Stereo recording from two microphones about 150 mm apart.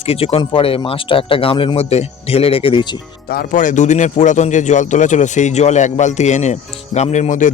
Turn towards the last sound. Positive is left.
turn(degrees=55)  # may be behind; listen again after turning